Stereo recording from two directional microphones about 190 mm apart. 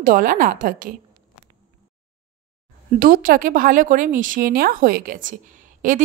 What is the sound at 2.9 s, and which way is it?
Speech, 50° right (ahead or behind).